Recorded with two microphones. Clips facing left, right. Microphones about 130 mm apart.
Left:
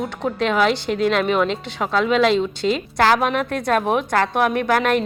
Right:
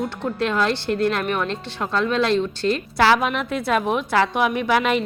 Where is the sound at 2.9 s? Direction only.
50° left (ahead or behind).